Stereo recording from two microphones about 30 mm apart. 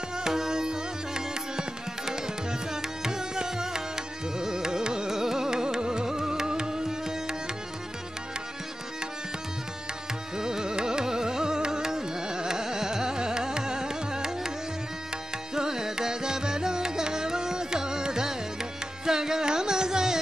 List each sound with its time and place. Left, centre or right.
0.2 s tabla: centre
10.3 s carnatic music: right
15.5 s music: centre
19.0 s carnatic music: centre